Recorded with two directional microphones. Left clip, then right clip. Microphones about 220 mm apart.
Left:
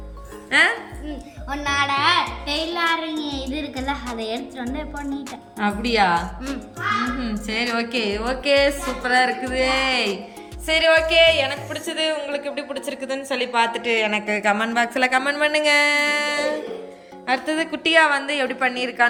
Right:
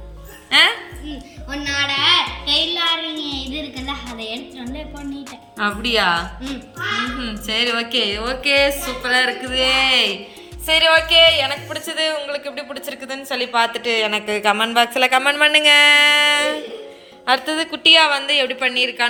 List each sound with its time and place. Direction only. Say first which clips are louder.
1.5 s music: even; 10° left (ahead or behind)
2.7 s child singing: right 2 dB; 5° left (ahead or behind)
3.2 s child singing: right 2 dB; 30° left (ahead or behind)
3.4 s music: left 1 dB; 10° left (ahead or behind)
4.2 s speech: left 1 dB; 10° left (ahead or behind)